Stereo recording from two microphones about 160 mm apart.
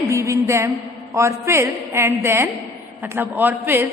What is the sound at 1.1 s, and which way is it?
A woman's voice, 15° right (ahead or behind).